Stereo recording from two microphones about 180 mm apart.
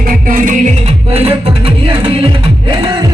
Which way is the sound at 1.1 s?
35° right (ahead or behind).